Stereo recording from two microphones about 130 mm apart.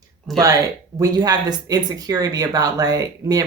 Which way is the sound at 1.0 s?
30° right (ahead or behind).